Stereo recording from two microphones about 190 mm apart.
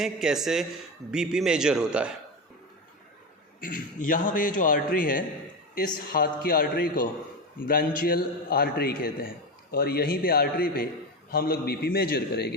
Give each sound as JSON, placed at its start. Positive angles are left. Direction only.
{"t": 0.0, "sound": "a man's voice", "side_deg": 0}
{"t": 3.6, "sound": "a man's voice", "side_deg": 45}